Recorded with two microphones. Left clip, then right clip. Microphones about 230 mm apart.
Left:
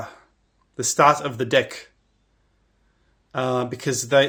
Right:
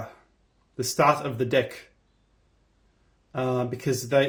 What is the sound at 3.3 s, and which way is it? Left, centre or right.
Speech, left.